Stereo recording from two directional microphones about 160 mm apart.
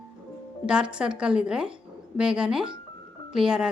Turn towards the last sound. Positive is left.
turn(degrees=-5)  # may be behind; listen again after turning